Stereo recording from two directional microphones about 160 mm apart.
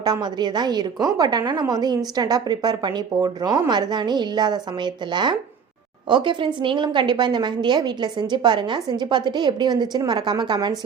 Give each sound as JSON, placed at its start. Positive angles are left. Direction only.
{"t": 0.0, "sound": "a woman's voice", "side_deg": -25}